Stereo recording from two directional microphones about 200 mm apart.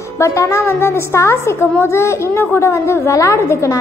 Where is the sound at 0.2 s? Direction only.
15° left (ahead or behind).